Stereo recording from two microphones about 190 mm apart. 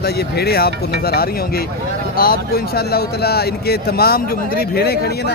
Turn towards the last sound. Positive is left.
turn(degrees=55)  # may be behind; listen again after turning